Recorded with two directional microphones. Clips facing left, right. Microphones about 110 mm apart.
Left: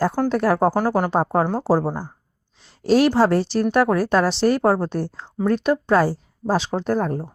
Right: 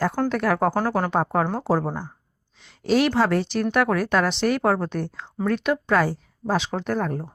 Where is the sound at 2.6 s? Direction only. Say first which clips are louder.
Left 4 dB; 35° left (ahead or behind).